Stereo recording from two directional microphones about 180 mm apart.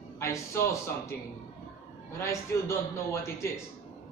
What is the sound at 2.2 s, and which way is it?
A man's voice, 15° left (ahead or behind).